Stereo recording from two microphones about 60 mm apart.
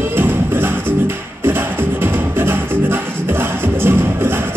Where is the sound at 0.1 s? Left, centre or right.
Right.